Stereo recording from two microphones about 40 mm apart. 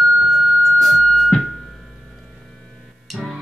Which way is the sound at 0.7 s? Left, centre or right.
Centre.